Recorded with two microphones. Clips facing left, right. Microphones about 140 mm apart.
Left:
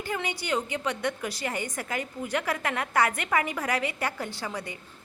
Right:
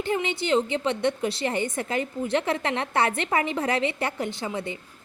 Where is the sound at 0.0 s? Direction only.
25° right (ahead or behind).